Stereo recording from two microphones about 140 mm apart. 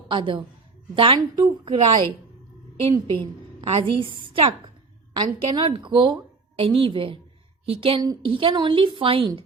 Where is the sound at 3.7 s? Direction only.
40° right (ahead or behind).